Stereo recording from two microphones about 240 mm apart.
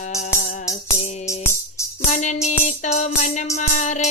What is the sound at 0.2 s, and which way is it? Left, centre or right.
Music, left.